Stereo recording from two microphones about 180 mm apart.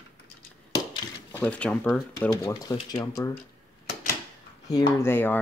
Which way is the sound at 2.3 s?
20° left (ahead or behind).